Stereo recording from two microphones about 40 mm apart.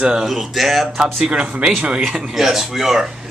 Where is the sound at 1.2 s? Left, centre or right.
Right.